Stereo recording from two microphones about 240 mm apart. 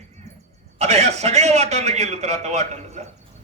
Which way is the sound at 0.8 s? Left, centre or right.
Right.